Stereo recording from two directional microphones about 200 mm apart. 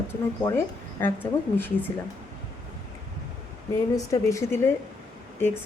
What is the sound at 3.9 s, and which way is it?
Speech, 15° left (ahead or behind).